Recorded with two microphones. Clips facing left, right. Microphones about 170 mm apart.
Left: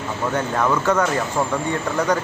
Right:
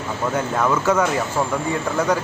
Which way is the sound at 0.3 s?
5° right (ahead or behind).